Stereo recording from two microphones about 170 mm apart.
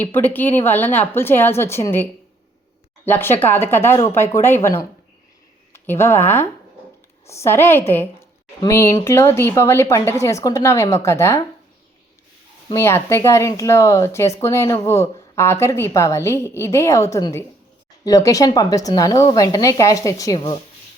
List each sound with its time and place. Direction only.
0.1 s speech: 10° left (ahead or behind)
3.1 s a woman's voice: 15° left (ahead or behind)
12.6 s a woman's voice: 15° left (ahead or behind)